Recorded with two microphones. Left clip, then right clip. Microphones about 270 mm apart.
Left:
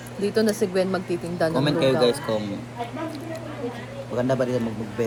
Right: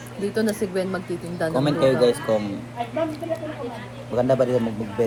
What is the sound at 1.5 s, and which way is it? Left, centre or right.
Speech, centre.